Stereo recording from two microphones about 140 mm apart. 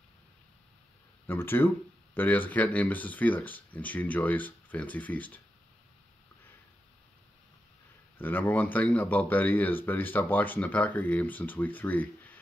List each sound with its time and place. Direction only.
1.2 s speech: 15° left (ahead or behind)
8.2 s speech: 15° left (ahead or behind)